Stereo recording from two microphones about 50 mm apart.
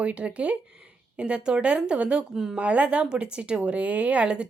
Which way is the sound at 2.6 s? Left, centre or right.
Right.